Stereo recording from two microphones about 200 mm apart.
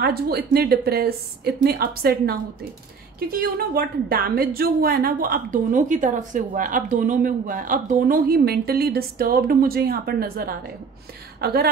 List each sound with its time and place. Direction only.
0.0 s speech: 50° right (ahead or behind)